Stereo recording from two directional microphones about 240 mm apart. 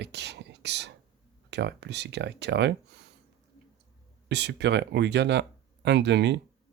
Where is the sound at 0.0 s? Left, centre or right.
Right.